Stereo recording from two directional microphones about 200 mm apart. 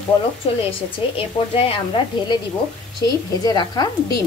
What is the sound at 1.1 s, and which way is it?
A woman's voice, 25° left (ahead or behind).